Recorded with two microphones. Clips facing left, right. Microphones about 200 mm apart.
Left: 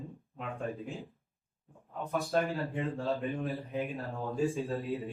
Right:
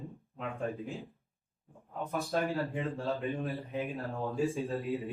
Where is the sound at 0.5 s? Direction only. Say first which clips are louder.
Right 1 dB; centre (ahead or behind).